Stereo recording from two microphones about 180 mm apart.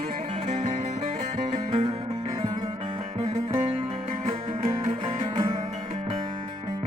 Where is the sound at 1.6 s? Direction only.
30° right (ahead or behind).